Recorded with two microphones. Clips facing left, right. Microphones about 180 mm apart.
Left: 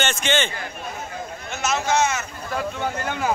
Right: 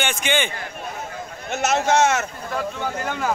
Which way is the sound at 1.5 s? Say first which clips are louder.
Right 4 dB; 65° right (ahead or behind).